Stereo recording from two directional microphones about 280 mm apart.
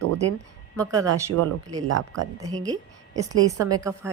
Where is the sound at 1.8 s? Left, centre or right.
Right.